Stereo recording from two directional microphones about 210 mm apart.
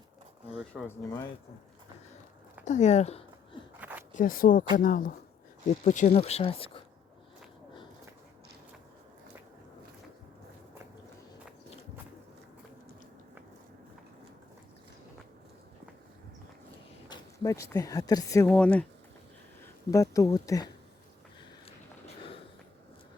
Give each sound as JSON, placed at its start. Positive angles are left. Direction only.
{"t": 0.5, "sound": "speech", "side_deg": 0}
{"t": 2.6, "sound": "speech", "side_deg": 35}
{"t": 3.8, "sound": "a sound", "side_deg": -10}
{"t": 4.1, "sound": "speech", "side_deg": 40}
{"t": 17.1, "sound": "speech", "side_deg": 15}